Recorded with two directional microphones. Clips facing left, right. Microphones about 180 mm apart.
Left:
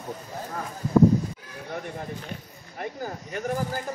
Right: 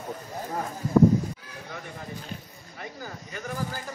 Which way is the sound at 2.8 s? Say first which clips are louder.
Left 6 dB; 55° left (ahead or behind).